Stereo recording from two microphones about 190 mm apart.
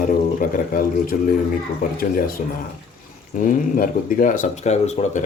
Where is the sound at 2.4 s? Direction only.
40° left (ahead or behind).